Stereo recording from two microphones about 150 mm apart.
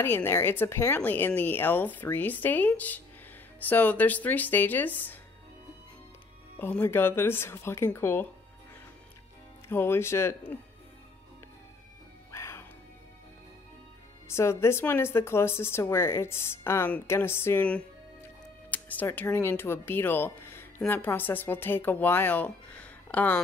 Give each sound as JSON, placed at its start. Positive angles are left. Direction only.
{"t": 0.0, "sound": "speech", "side_deg": 15}
{"t": 6.6, "sound": "speech", "side_deg": 15}
{"t": 9.7, "sound": "speech", "side_deg": 15}
{"t": 12.3, "sound": "music", "side_deg": 20}
{"t": 14.2, "sound": "speech", "side_deg": 15}